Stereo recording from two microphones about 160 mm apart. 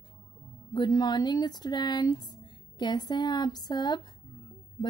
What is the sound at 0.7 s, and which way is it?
A woman's voice, 25° left (ahead or behind).